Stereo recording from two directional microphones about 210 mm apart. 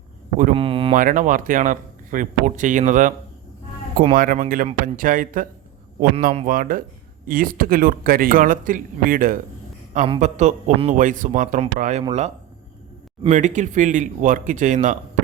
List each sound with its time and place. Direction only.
0.5 s a sound: 25° right (ahead or behind)
0.9 s speech: 40° right (ahead or behind)
4.1 s speech: 40° right (ahead or behind)
13.2 s speech: 35° right (ahead or behind)